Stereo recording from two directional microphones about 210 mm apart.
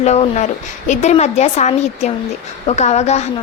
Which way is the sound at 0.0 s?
30° left (ahead or behind).